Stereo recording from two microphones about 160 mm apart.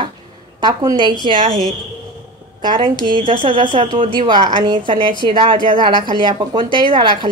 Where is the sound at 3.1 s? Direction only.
30° right (ahead or behind).